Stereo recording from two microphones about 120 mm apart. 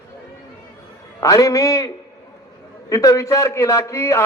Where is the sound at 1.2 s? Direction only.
30° left (ahead or behind).